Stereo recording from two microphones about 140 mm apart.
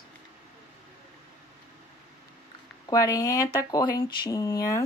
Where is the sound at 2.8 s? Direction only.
25° left (ahead or behind).